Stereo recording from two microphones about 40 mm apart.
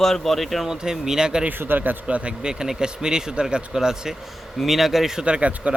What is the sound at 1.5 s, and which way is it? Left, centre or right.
Speech, right.